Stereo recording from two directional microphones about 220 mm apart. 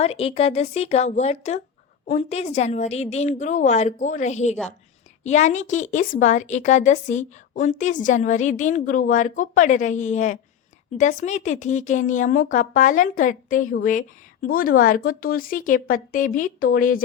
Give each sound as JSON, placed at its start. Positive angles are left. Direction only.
{"t": 0.0, "sound": "a woman's voice", "side_deg": 25}